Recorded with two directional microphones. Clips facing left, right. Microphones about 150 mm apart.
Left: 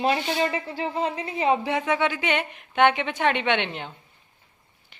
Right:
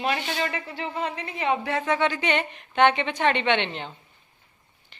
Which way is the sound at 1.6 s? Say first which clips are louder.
Even; 10° left (ahead or behind).